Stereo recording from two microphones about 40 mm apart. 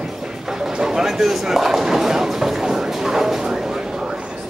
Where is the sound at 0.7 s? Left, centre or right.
Centre.